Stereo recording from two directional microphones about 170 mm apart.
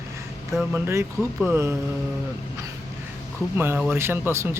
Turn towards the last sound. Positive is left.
turn(degrees=-15)  # may be behind; listen again after turning